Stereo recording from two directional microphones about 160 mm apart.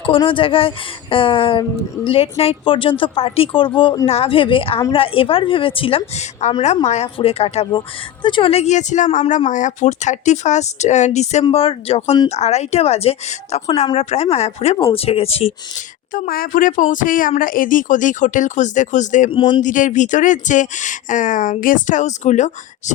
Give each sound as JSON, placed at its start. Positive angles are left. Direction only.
{"t": 0.0, "sound": "speech", "side_deg": 35}
{"t": 16.1, "sound": "speech", "side_deg": 60}
{"t": 19.3, "sound": "speech", "side_deg": 30}
{"t": 19.6, "sound": "speech", "side_deg": 55}